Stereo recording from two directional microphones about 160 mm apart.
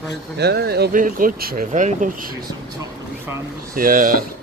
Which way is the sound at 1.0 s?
60° right (ahead or behind).